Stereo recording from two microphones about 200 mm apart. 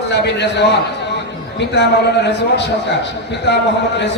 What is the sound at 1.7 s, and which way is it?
A man's voice, 60° left (ahead or behind).